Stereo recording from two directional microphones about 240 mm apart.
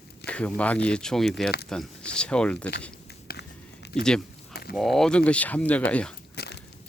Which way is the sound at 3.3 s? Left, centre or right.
Left.